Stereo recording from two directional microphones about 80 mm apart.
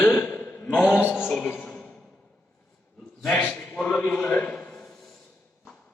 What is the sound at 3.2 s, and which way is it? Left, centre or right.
A man's voice, centre.